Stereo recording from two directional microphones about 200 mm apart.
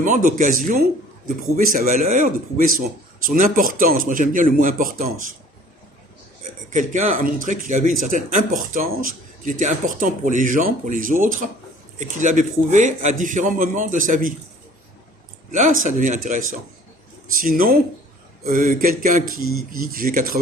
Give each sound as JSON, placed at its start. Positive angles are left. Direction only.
{"t": 0.0, "sound": "a man's voice", "side_deg": -40}
{"t": 6.7, "sound": "speech", "side_deg": -40}
{"t": 15.5, "sound": "a man's voice", "side_deg": -40}